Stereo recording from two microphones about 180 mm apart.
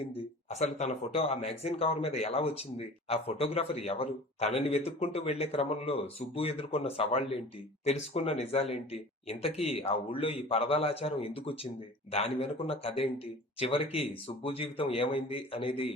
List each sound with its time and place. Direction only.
0.5 s speech: 35° left (ahead or behind)